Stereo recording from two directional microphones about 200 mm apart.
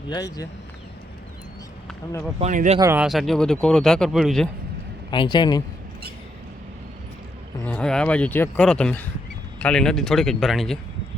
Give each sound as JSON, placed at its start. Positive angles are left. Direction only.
{"t": 0.1, "sound": "speech", "side_deg": 20}
{"t": 2.4, "sound": "speech", "side_deg": -35}
{"t": 2.7, "sound": "speech", "side_deg": -15}
{"t": 3.0, "sound": "speech", "side_deg": 0}
{"t": 5.1, "sound": "speech", "side_deg": 25}
{"t": 7.6, "sound": "speech", "side_deg": 5}